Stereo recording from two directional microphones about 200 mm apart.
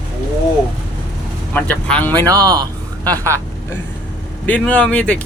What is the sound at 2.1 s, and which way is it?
Speech, 20° right (ahead or behind).